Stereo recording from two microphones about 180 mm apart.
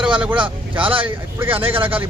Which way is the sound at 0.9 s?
30° right (ahead or behind).